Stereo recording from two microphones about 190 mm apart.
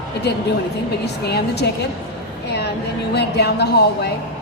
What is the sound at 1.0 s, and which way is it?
A woman's voice, 60° left (ahead or behind).